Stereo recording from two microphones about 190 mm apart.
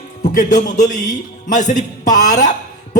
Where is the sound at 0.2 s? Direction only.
40° left (ahead or behind).